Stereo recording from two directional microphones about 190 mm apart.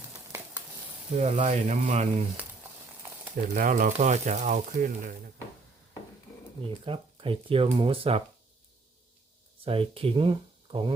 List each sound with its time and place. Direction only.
0.1 s a sound: 20° right (ahead or behind)
1.2 s speech: 35° right (ahead or behind)
3.3 s speech: 45° right (ahead or behind)
6.8 s speech: 30° right (ahead or behind)
9.6 s speech: 30° right (ahead or behind)